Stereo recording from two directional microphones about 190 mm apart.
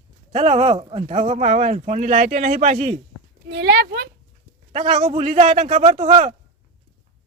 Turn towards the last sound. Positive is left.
turn(degrees=-40)  # may be behind; listen again after turning